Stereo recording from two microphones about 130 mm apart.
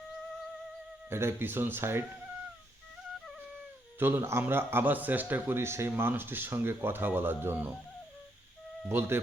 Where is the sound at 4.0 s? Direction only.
15° right (ahead or behind).